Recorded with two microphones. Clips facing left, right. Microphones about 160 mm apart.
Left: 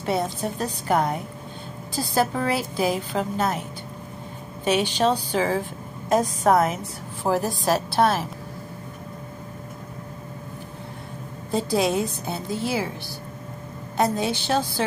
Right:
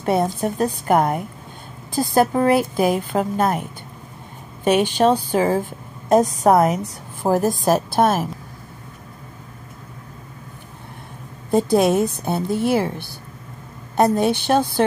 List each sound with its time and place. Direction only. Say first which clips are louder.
0.0 s a woman's voice: right 5 dB; 50° right (ahead or behind)
4.6 s a woman's voice: right 5 dB; 50° right (ahead or behind)
11.5 s a woman's voice: right 6 dB; 55° right (ahead or behind)